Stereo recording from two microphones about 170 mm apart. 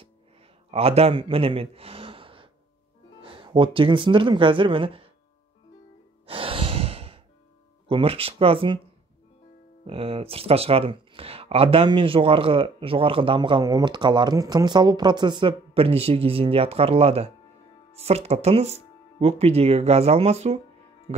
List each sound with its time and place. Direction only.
0.7 s speech: 35° right (ahead or behind)
6.2 s sigh: 30° right (ahead or behind)
7.9 s speech: 35° right (ahead or behind)
9.8 s speech: 35° right (ahead or behind)